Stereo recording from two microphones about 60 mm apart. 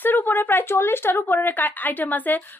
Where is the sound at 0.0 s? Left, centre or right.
Left.